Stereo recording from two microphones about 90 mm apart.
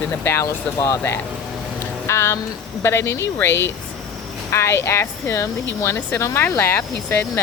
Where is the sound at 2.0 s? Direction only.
30° left (ahead or behind).